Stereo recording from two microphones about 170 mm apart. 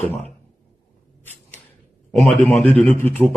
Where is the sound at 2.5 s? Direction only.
10° left (ahead or behind).